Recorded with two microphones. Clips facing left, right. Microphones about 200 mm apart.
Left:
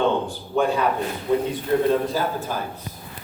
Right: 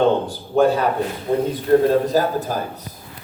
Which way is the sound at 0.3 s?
40° right (ahead or behind).